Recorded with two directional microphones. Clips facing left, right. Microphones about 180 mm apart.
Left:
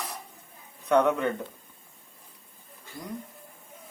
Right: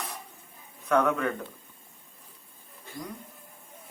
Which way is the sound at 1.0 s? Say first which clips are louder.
Left 2 dB; 20° left (ahead or behind).